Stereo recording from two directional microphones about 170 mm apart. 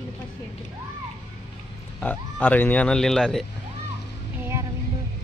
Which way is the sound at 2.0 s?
10° left (ahead or behind).